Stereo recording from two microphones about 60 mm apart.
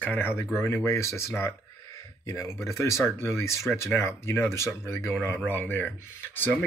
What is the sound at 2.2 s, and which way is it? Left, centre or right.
Speech, left.